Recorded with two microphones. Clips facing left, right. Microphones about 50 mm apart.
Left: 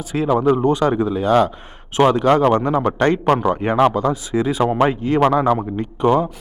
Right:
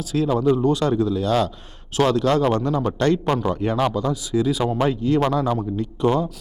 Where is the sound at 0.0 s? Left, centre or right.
Left.